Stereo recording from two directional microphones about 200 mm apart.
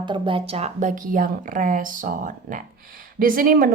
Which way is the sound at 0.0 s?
25° right (ahead or behind).